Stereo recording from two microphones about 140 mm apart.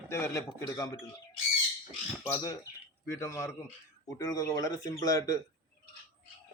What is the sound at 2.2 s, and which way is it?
Speech, 20° left (ahead or behind).